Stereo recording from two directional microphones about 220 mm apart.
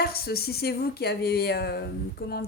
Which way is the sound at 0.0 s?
45° left (ahead or behind).